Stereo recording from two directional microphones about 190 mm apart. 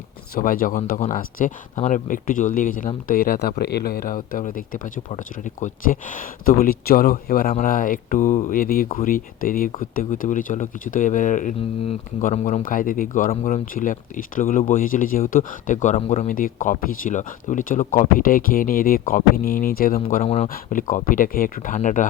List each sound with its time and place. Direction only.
0.3 s speech: 50° left (ahead or behind)
20.5 s speech: 45° left (ahead or behind)